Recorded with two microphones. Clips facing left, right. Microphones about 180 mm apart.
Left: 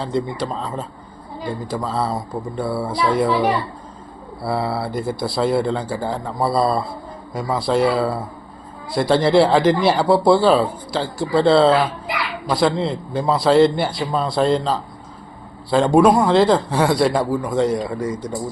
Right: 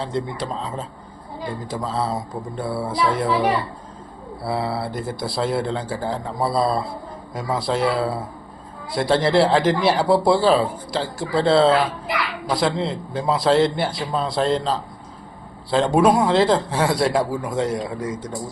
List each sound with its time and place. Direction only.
0.0 s speech: centre (ahead or behind)
4.4 s speech: centre (ahead or behind)